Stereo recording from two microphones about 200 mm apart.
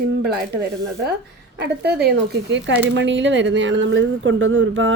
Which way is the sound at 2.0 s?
60° right (ahead or behind).